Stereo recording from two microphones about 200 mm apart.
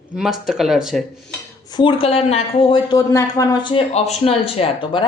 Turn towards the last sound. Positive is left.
turn(degrees=25)  # may be behind; listen again after turning